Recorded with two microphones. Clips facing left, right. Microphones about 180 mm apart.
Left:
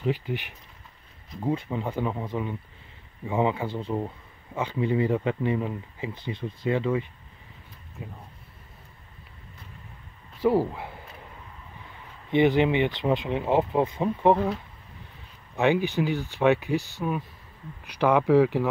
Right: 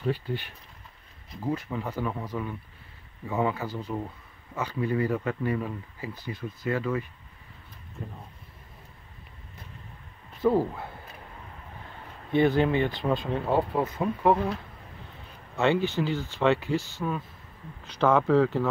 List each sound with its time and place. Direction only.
0.0 s speech: 15° left (ahead or behind)
10.4 s speech: 10° left (ahead or behind)
12.3 s speech: 20° left (ahead or behind)
15.5 s speech: 15° left (ahead or behind)